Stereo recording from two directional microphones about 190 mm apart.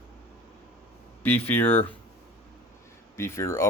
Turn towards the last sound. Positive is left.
turn(degrees=15)  # may be behind; listen again after turning